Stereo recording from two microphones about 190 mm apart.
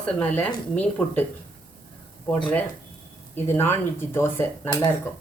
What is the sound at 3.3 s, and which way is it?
Speech, 10° left (ahead or behind).